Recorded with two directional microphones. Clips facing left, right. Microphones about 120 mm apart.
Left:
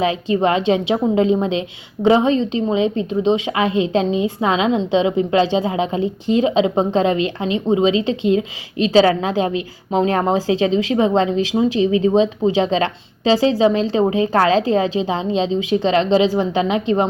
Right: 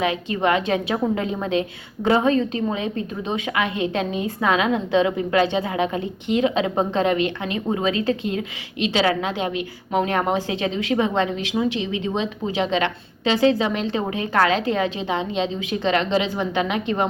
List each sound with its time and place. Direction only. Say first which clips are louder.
0.0 s a woman's voice: left 4 dB; 30° left (ahead or behind)